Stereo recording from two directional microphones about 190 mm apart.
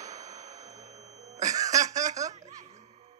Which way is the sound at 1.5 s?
20° right (ahead or behind).